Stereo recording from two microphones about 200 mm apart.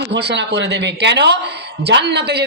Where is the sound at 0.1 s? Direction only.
55° right (ahead or behind).